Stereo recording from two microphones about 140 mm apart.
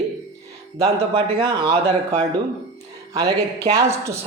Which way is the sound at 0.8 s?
40° right (ahead or behind).